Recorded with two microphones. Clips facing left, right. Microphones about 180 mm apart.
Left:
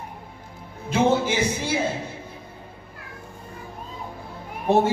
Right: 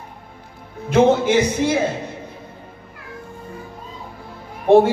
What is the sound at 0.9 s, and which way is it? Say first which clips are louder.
Speech: right 6 dB; 55° right (ahead or behind).